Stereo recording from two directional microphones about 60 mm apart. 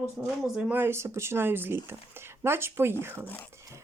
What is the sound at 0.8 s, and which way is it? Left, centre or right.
Speech, right.